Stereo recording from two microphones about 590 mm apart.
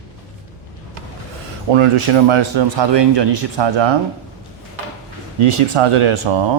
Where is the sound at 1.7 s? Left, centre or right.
Right.